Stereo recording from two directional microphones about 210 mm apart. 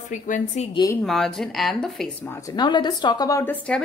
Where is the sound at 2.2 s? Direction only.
15° left (ahead or behind).